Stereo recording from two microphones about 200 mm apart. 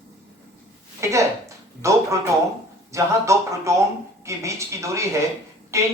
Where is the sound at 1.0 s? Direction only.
15° right (ahead or behind).